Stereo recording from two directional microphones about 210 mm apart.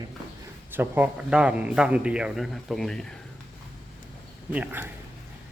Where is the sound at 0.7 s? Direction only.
10° right (ahead or behind).